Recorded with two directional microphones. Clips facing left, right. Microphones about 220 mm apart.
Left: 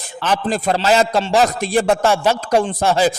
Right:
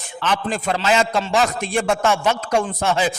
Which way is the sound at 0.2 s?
40° left (ahead or behind).